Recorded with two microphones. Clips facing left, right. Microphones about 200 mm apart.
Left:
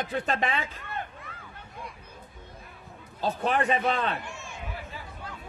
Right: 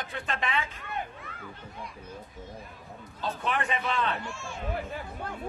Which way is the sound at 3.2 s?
40° left (ahead or behind).